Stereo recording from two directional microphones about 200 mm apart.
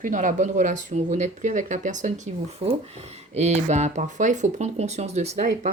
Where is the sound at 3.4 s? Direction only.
35° right (ahead or behind).